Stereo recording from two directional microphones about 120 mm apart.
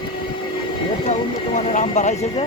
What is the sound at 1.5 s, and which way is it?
Speech, 80° left.